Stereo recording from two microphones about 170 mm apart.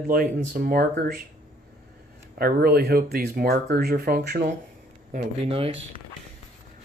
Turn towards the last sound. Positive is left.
turn(degrees=-35)  # may be behind; listen again after turning